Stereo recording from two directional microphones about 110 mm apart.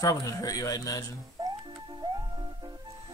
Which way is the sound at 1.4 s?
35° right (ahead or behind).